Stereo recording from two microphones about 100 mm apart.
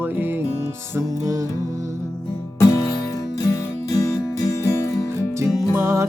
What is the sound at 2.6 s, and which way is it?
Music, 35° left (ahead or behind).